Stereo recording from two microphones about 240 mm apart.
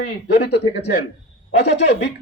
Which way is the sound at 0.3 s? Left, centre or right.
Left.